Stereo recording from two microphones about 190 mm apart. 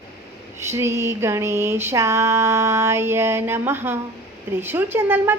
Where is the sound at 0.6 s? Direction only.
15° right (ahead or behind).